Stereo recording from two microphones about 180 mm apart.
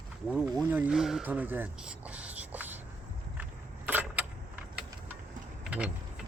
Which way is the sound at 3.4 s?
10° right (ahead or behind).